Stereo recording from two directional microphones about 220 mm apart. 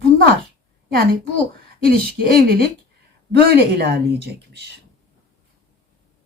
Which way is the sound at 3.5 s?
50° right (ahead or behind).